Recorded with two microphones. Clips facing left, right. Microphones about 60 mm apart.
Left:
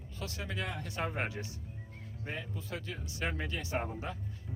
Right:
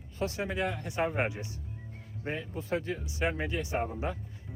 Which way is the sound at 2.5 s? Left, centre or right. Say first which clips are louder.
Right 8 dB; right.